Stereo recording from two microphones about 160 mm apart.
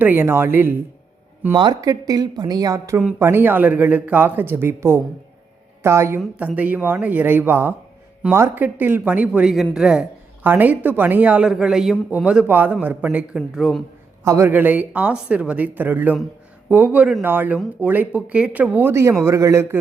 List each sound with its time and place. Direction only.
0.0 s a woman's voice: 10° right (ahead or behind)
1.5 s a woman's voice: 25° right (ahead or behind); by 13.8 s 5° right (ahead or behind)
14.3 s a woman's voice: 15° right (ahead or behind)